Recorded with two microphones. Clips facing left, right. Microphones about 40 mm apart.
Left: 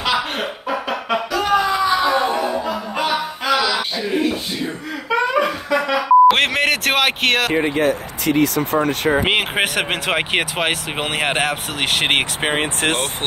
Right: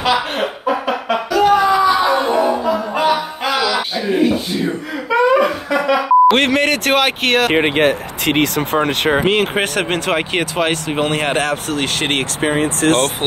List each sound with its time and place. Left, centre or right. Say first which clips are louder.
0.0 s a sound: right 4 dB; centre
2.1 s music: right 3 dB; centre
5.1 s beep: right 5 dB; centre
7.5 s speech: right 3 dB; right
9.3 s speech: right 2 dB; centre
12.4 s speech: right 3 dB; left